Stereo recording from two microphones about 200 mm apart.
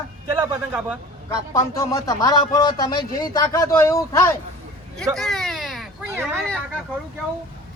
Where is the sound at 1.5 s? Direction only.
15° left (ahead or behind).